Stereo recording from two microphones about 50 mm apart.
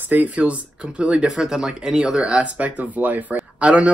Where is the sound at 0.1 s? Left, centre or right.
Right.